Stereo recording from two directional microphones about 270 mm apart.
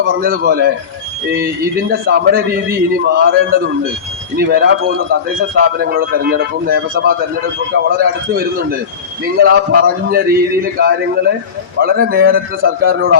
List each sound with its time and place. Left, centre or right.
0.0 s a man's voice: right
1.9 s a man's voice: right